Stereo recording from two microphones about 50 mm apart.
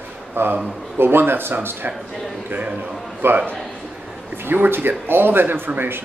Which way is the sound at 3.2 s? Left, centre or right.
Right.